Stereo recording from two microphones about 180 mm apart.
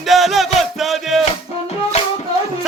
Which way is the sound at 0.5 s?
Centre (ahead or behind).